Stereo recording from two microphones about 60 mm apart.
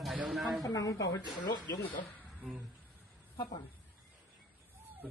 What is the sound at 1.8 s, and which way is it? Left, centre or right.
Speech, left.